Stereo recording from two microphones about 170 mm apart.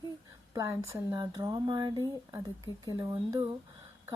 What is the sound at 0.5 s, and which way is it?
Speech, 15° right (ahead or behind).